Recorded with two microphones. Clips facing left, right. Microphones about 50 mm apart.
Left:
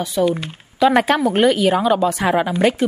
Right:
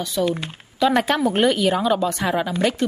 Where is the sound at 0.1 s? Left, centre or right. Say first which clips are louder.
Left 4 dB; centre.